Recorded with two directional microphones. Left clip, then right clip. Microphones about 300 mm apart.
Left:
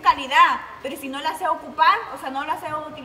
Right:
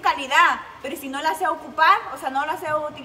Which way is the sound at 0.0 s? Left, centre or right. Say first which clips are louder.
Left 2 dB; centre.